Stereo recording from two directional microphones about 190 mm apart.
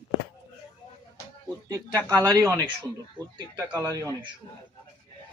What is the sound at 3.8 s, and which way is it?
Speech, 15° right (ahead or behind).